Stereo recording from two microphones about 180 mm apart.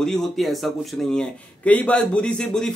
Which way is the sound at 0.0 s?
Centre (ahead or behind).